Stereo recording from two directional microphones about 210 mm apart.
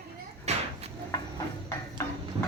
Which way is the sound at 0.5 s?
30° right (ahead or behind).